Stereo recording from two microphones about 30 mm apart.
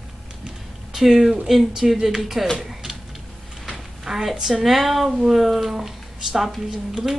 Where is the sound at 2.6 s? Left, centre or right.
Centre.